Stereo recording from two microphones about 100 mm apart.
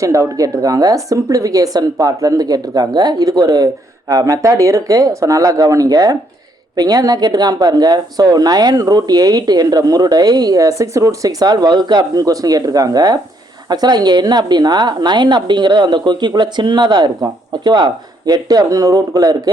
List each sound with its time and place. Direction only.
0.0 s a woman's voice: 35° right (ahead or behind)